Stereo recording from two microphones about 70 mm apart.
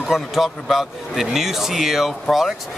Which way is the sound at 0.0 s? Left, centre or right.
Centre.